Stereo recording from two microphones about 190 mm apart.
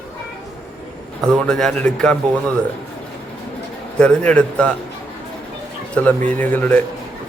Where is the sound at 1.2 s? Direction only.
5° left (ahead or behind).